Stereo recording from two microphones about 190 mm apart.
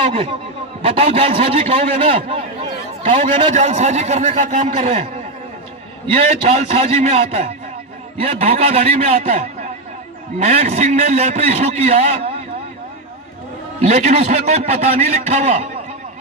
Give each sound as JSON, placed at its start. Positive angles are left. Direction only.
{"t": 0.1, "sound": "a man's voice", "side_deg": -30}
{"t": 3.0, "sound": "a man's voice", "side_deg": -40}
{"t": 6.1, "sound": "a man's voice", "side_deg": -30}
{"t": 13.8, "sound": "a man's voice", "side_deg": -35}